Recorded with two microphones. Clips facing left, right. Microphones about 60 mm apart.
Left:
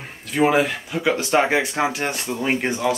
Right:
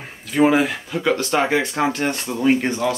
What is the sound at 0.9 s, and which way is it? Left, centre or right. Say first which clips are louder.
Speech: even; centre.